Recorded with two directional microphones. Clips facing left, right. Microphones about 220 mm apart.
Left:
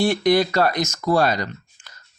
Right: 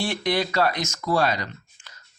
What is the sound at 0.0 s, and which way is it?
Speech, 40° left (ahead or behind).